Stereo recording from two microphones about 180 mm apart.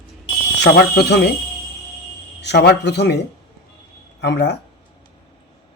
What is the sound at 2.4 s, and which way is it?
Speech, 70° left (ahead or behind).